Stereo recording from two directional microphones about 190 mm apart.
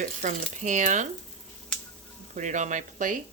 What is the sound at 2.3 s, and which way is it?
Speech, 40° right (ahead or behind).